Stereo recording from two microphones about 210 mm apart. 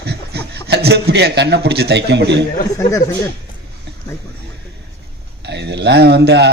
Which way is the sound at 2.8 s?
15° left (ahead or behind).